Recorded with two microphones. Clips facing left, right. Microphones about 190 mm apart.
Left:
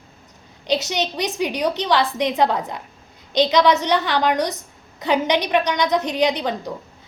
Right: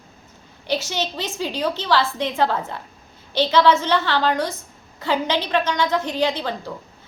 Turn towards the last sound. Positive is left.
turn(degrees=20)  # may be behind; listen again after turning